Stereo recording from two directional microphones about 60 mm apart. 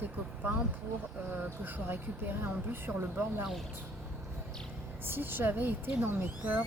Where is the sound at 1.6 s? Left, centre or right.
Right.